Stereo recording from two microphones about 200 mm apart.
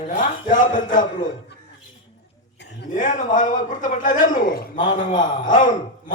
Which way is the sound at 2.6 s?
60° left (ahead or behind).